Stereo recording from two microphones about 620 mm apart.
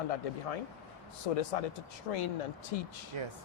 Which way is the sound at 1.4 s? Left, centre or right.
Left.